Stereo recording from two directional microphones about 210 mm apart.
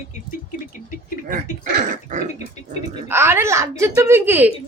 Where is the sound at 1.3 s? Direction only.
40° right (ahead or behind).